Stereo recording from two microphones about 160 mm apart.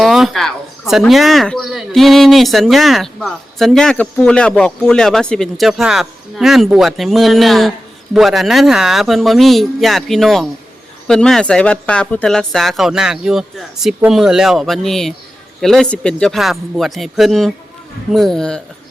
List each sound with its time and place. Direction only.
0.0 s speech: centre (ahead or behind)